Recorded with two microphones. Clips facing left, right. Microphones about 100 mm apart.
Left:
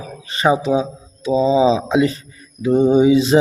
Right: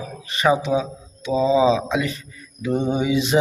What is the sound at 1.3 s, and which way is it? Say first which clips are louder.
Mantra: left 3 dB; 30° left (ahead or behind).